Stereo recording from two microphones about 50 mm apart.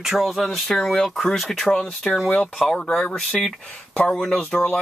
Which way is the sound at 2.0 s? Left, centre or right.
Centre.